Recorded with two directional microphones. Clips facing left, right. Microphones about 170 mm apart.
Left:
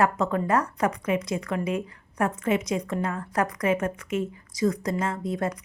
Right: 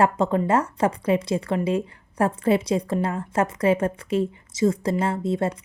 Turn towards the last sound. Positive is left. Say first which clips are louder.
# right 4 dB
turn(degrees=-25)  # may be behind; listen again after turning